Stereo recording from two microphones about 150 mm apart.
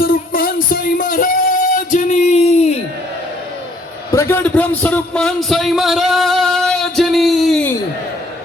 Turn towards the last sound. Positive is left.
turn(degrees=0)  # may be behind; listen again after turning